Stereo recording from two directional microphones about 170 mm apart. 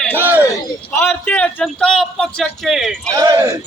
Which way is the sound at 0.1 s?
10° right (ahead or behind).